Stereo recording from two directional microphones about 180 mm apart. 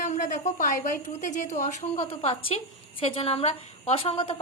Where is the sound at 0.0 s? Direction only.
40° left (ahead or behind).